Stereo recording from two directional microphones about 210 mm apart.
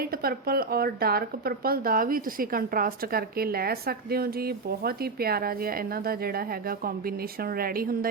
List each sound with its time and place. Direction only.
0.0 s a woman's voice: 45° right (ahead or behind)